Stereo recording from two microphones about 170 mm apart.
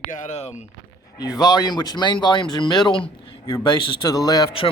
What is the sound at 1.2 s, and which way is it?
Speech, 25° left (ahead or behind).